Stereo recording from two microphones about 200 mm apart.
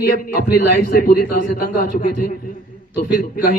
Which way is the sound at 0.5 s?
45° left (ahead or behind).